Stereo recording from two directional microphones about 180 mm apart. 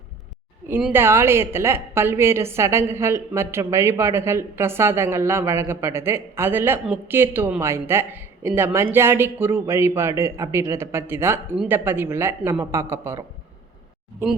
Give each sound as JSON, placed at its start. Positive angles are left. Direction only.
{"t": 0.7, "sound": "a woman's voice", "side_deg": -5}